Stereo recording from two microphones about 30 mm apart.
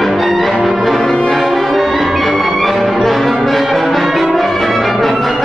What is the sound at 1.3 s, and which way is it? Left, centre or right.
Music, centre.